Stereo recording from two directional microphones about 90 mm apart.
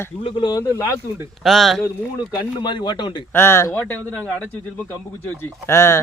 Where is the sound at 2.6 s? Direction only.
55° left (ahead or behind).